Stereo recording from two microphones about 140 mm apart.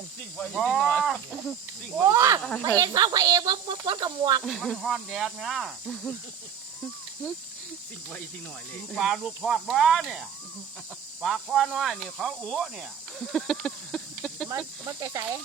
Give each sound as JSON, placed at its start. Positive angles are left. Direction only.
{"t": 0.5, "sound": "speech", "side_deg": 0}
{"t": 2.0, "sound": "speech", "side_deg": -20}
{"t": 2.4, "sound": "speech", "side_deg": 5}
{"t": 2.6, "sound": "speech", "side_deg": -25}
{"t": 4.4, "sound": "speech", "side_deg": 0}
{"t": 9.0, "sound": "speech", "side_deg": 0}
{"t": 13.1, "sound": "a sound", "side_deg": 0}
{"t": 14.8, "sound": "speech", "side_deg": -25}